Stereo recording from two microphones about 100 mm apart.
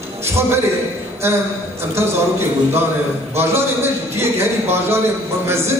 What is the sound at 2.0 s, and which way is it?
Speech, 25° right (ahead or behind).